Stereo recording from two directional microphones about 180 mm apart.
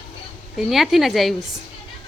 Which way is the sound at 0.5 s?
Centre (ahead or behind).